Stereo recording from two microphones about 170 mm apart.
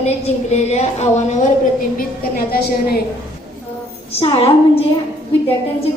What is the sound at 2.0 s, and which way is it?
A woman's voice, 60° left (ahead or behind).